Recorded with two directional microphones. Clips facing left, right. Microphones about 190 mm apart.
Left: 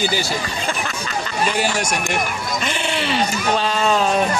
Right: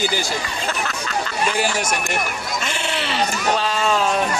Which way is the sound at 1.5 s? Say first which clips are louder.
Even; 5° right (ahead or behind).